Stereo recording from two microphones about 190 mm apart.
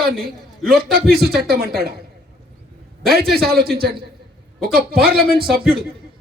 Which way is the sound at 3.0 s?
55° right (ahead or behind).